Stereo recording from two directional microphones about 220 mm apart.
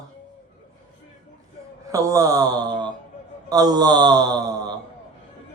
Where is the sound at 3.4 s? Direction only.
15° right (ahead or behind).